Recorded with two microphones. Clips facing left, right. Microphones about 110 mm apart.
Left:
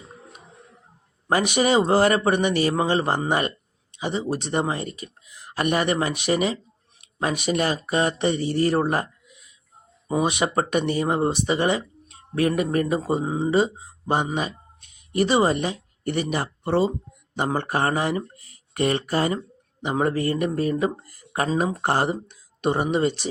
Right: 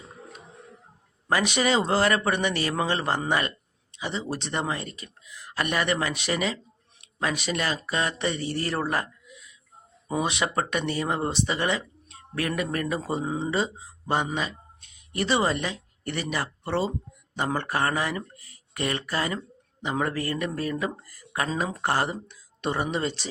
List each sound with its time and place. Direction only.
1.5 s speech: 15° left (ahead or behind)
10.1 s speech: 15° left (ahead or behind)
10.5 s speech: 25° left (ahead or behind)